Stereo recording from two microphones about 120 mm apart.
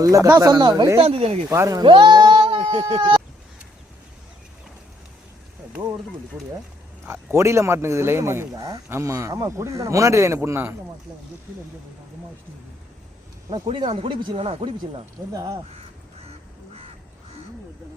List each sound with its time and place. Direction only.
0.0 s speech: 25° right (ahead or behind)
0.9 s speech: 55° right (ahead or behind)
1.5 s speech: 25° right (ahead or behind)
1.8 s speech: 40° right (ahead or behind)
7.0 s speech: 20° right (ahead or behind)
13.5 s speech: 40° right (ahead or behind)
16.2 s goose: 55° right (ahead or behind)